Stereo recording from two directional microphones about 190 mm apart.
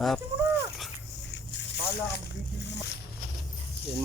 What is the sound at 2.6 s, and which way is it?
Boat, 65° left (ahead or behind).